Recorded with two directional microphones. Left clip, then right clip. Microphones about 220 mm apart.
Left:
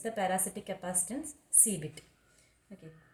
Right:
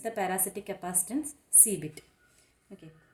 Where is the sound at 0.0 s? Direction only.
50° right (ahead or behind).